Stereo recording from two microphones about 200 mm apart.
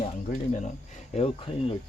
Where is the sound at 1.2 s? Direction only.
30° left (ahead or behind).